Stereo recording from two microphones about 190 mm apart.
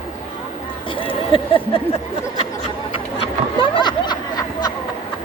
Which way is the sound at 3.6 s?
25° left (ahead or behind).